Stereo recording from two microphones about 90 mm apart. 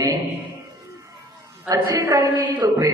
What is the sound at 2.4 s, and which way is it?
Mantra, 55° right (ahead or behind).